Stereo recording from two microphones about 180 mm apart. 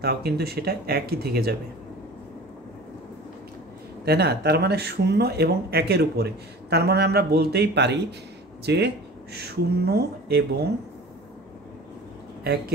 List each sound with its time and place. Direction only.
0.0 s speech: 60° right (ahead or behind)
4.0 s speech: 65° right (ahead or behind)